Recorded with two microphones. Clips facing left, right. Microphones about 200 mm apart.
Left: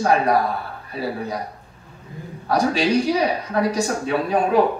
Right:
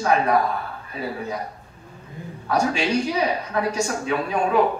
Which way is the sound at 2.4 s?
35° left (ahead or behind).